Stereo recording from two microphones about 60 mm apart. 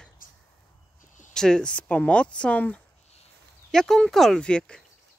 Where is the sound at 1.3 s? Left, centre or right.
Centre.